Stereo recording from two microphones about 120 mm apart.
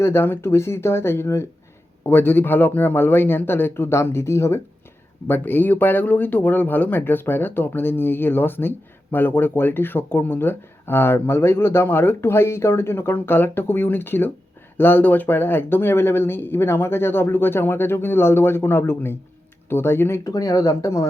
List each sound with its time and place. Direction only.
0.0 s speech: 20° left (ahead or behind)